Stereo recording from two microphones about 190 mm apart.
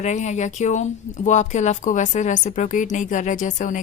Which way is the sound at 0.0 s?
40° left (ahead or behind).